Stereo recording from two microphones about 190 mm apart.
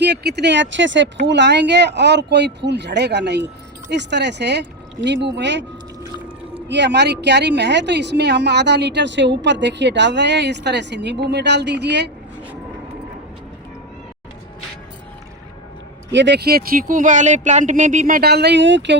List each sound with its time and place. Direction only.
0.0 s a woman's voice: 60° right (ahead or behind)
6.7 s a woman's voice: 65° right (ahead or behind)
16.1 s speech: 65° right (ahead or behind)